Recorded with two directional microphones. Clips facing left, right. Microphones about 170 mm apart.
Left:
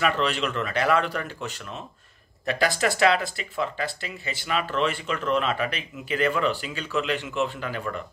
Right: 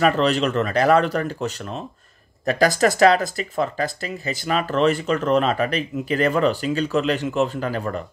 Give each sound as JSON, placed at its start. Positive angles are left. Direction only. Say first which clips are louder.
{"t": 0.0, "sound": "speech", "louder": "right 6 dB", "side_deg": -40}